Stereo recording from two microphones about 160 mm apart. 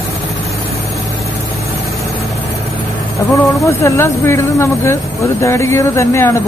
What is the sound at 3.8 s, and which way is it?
Speech, 15° left (ahead or behind).